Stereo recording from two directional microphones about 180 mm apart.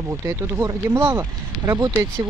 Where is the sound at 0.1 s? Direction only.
15° right (ahead or behind).